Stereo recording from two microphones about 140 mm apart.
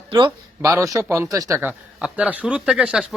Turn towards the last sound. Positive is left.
turn(degrees=-5)  # may be behind; listen again after turning